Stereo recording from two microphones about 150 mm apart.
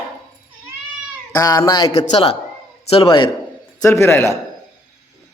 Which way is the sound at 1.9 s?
45° left (ahead or behind).